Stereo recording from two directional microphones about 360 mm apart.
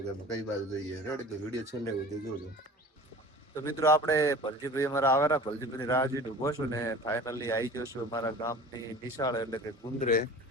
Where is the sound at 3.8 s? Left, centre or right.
Centre.